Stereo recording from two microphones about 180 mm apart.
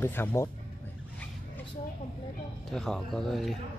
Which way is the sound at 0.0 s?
10° left (ahead or behind).